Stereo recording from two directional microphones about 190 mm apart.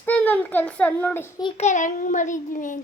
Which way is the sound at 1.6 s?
40° left (ahead or behind).